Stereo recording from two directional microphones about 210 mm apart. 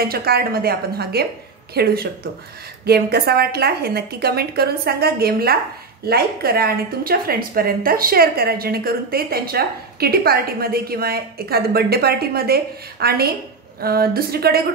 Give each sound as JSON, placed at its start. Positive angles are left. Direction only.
{"t": 0.0, "sound": "speech", "side_deg": -45}